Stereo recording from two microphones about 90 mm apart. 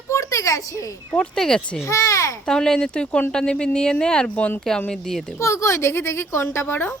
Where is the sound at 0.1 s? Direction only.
35° left (ahead or behind).